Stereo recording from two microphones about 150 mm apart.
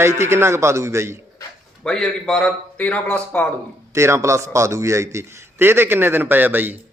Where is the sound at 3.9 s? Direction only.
20° right (ahead or behind).